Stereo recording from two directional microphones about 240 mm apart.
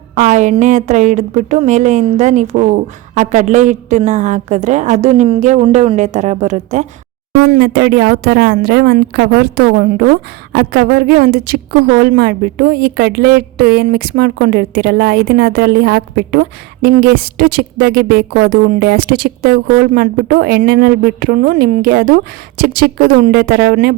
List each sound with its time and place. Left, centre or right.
0.2 s a woman's voice: right